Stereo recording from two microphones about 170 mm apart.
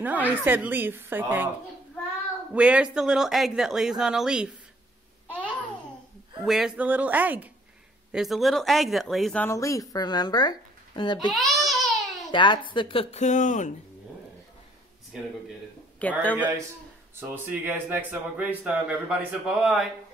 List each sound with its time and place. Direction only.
0.0 s a woman's voice: 10° right (ahead or behind)
2.5 s speech: 5° right (ahead or behind)
6.4 s a woman's voice: centre (ahead or behind); by 11.1 s 25° left (ahead or behind)
11.3 s babbling: centre (ahead or behind)
12.3 s a woman's voice: 30° left (ahead or behind); by 13.7 s 45° left (ahead or behind)
16.0 s speech: 10° left (ahead or behind)
16.3 s a woman's voice: 10° right (ahead or behind)